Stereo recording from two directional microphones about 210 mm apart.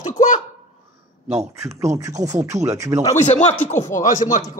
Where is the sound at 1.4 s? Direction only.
15° right (ahead or behind).